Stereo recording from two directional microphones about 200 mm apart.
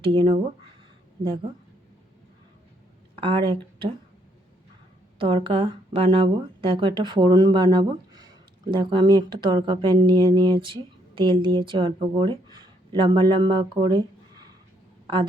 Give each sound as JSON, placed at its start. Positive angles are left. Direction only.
{"t": 0.0, "sound": "speech", "side_deg": -25}
{"t": 3.2, "sound": "speech", "side_deg": -25}
{"t": 5.2, "sound": "a woman's voice", "side_deg": -25}